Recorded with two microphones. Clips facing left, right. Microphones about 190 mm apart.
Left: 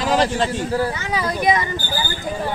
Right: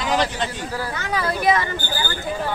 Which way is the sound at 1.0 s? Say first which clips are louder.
Left 1 dB; 15° left (ahead or behind).